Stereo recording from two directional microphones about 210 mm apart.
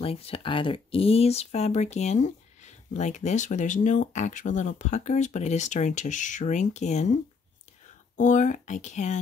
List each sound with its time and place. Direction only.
0.0 s speech: 25° left (ahead or behind)
8.2 s speech: 35° left (ahead or behind)